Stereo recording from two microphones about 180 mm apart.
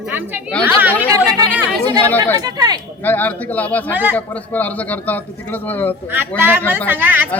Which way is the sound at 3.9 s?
10° right (ahead or behind).